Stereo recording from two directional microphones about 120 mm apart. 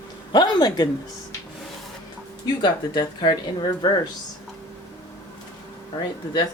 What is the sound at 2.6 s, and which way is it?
Speech, 40° left (ahead or behind).